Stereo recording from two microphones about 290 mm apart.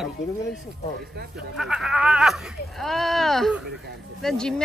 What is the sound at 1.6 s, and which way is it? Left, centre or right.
Speech, centre.